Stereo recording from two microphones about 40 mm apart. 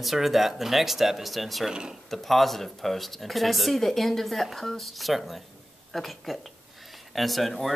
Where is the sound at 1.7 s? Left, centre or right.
Right.